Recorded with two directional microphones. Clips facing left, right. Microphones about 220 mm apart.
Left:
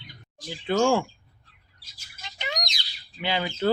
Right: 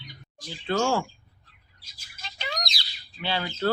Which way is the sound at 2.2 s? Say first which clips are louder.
Left 1 dB; 20° left (ahead or behind).